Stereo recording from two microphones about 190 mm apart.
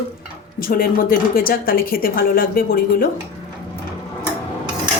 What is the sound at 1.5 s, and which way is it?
A woman's voice, 50° left (ahead or behind).